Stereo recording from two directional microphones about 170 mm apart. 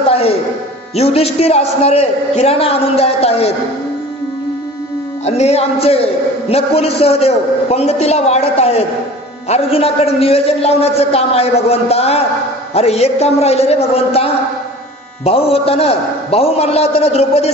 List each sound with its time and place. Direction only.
0.9 s a man's voice: 35° left (ahead or behind)
5.2 s a man's voice: 40° left (ahead or behind)